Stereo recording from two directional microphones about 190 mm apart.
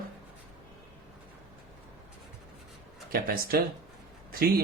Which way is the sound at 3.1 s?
50° right (ahead or behind).